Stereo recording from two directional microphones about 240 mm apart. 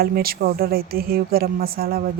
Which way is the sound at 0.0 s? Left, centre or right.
Right.